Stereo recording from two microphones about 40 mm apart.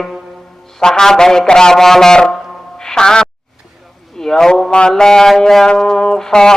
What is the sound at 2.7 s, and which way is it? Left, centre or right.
Quack, centre.